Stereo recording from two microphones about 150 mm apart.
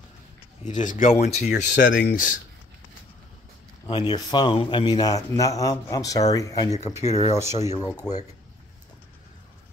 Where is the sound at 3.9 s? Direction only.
30° left (ahead or behind).